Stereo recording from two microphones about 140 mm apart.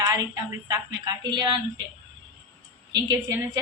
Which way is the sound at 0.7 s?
30° right (ahead or behind).